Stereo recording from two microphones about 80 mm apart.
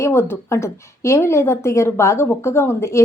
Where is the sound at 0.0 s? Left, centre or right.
Left.